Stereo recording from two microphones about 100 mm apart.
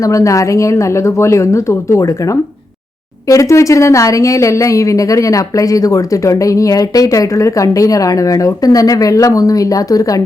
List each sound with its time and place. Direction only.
0.0 s a woman's voice: 35° left (ahead or behind)